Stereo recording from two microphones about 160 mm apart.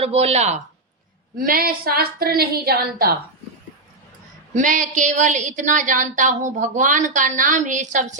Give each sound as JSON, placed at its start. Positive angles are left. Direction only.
{"t": 0.0, "sound": "speech", "side_deg": -40}
{"t": 1.4, "sound": "a woman's voice", "side_deg": -65}
{"t": 4.5, "sound": "a woman's voice", "side_deg": -50}